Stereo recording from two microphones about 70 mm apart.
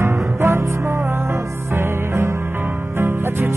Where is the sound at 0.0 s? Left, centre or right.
Right.